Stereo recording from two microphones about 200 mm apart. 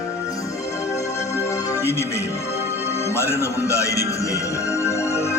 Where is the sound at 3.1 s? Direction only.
10° left (ahead or behind).